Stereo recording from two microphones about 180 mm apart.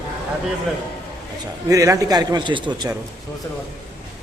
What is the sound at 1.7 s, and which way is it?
A man's voice, 20° right (ahead or behind).